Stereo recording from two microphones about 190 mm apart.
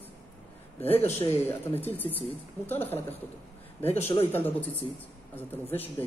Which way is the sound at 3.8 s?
35° left (ahead or behind).